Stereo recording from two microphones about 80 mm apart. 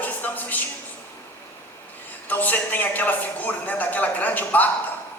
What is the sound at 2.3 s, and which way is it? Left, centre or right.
A man's voice, left.